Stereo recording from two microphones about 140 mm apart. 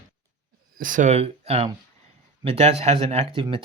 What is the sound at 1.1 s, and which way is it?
Speech, 45° right (ahead or behind).